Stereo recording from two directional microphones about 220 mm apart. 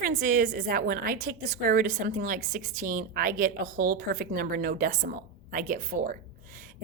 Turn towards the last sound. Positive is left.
turn(degrees=-35)  # may be behind; listen again after turning